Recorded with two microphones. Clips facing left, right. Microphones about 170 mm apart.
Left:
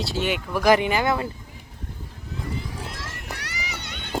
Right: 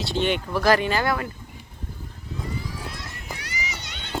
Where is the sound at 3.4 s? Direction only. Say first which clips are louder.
Even; 65° left (ahead or behind).